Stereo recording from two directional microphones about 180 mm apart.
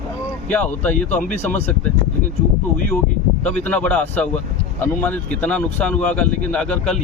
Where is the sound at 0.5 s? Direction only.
10° left (ahead or behind).